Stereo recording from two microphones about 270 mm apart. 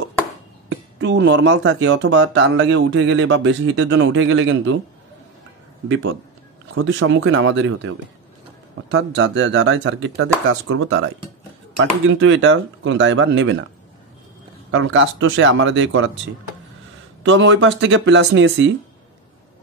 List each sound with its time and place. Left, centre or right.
0.7 s speech: right
6.7 s speech: right
14.7 s speech: right
17.2 s speech: right